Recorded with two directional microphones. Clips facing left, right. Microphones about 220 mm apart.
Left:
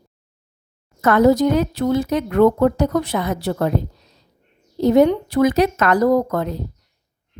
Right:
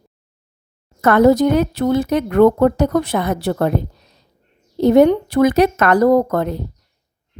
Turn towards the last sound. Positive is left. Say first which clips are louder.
# right 3 dB
turn(degrees=-55)  # may be behind; listen again after turning